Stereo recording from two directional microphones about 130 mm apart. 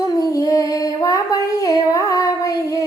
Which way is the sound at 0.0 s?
25° left (ahead or behind).